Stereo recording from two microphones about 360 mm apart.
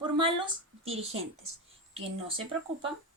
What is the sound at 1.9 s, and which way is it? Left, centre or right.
Speech, centre.